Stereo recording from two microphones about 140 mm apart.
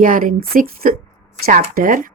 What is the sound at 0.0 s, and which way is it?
A woman's voice, 75° right (ahead or behind).